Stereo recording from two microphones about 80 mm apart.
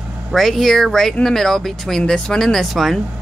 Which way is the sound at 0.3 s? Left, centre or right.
Centre.